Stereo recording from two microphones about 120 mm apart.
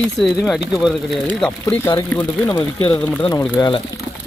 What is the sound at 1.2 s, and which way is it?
Speech, 10° left (ahead or behind).